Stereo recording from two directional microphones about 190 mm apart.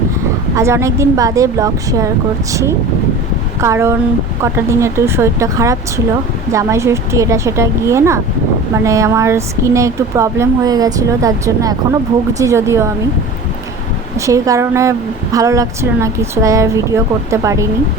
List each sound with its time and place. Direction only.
0.5 s speech: 15° right (ahead or behind)
14.2 s speech: 15° right (ahead or behind)